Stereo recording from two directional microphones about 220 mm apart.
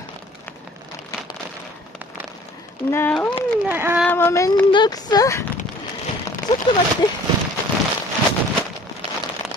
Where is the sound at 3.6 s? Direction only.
10° right (ahead or behind).